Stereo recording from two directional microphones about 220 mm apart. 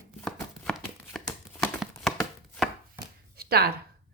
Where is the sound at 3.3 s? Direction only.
45° right (ahead or behind).